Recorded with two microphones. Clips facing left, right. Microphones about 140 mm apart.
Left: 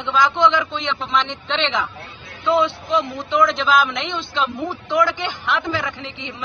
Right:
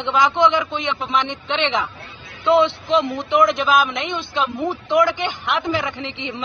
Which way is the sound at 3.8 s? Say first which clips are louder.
Right 1 dB; 50° right (ahead or behind).